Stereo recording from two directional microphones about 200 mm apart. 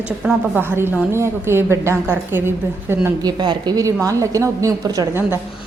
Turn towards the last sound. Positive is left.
turn(degrees=-10)  # may be behind; listen again after turning